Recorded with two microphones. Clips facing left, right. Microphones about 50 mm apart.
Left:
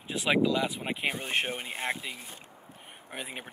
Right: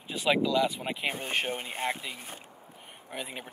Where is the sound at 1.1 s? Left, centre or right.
Left.